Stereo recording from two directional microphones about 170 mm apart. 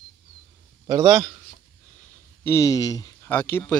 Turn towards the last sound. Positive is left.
turn(degrees=15)  # may be behind; listen again after turning